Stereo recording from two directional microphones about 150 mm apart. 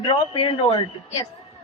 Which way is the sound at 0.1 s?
35° left (ahead or behind).